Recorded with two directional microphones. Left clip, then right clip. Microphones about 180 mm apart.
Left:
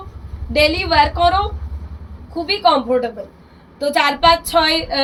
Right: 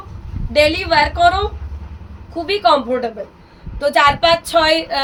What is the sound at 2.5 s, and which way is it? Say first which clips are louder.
A woman's voice: right 1 dB; 20° right (ahead or behind).